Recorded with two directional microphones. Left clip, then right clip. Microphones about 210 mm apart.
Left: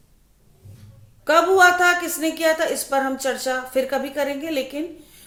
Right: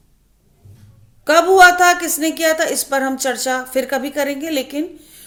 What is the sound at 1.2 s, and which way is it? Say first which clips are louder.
A woman's voice: right 5 dB; 40° right (ahead or behind).